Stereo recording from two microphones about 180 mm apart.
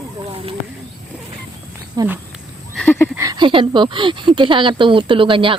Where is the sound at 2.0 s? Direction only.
20° right (ahead or behind).